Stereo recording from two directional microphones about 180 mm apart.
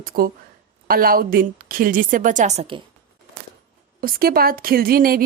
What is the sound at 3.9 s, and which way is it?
A woman's voice, 55° right (ahead or behind).